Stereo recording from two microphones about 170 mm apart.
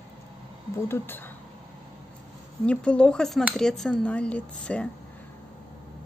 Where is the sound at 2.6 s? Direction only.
5° left (ahead or behind).